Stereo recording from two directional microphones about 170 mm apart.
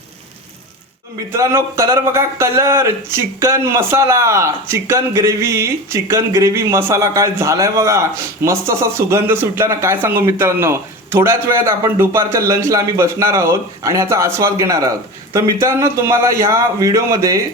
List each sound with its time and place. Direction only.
1.3 s speech: 15° right (ahead or behind)